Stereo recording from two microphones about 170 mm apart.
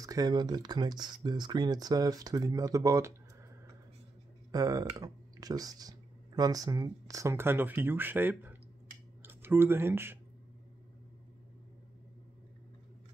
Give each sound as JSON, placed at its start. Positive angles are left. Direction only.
{"t": 0.0, "sound": "speech", "side_deg": -20}
{"t": 4.5, "sound": "speech", "side_deg": -20}